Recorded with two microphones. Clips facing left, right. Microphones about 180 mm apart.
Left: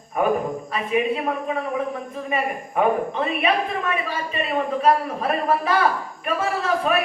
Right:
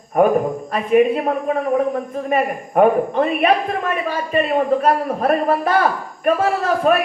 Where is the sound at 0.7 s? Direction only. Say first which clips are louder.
Right 8 dB; 50° right (ahead or behind).